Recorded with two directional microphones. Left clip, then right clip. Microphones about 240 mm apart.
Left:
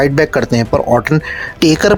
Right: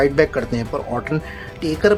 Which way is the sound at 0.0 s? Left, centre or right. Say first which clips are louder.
Left 4 dB; left.